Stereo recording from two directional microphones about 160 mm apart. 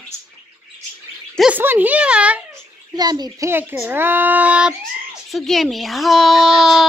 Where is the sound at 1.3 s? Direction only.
5° right (ahead or behind).